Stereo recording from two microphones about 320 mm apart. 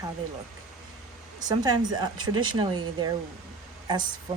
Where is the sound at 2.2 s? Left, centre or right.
Right.